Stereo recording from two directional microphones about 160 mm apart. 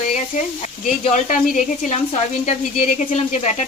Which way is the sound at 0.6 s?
50° left (ahead or behind).